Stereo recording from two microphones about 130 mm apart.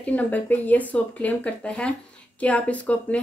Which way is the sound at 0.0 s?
10° left (ahead or behind).